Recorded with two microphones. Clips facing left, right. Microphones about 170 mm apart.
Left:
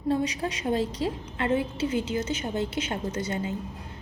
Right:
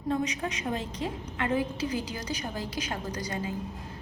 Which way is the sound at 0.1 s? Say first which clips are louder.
Left 3 dB; 30° left (ahead or behind).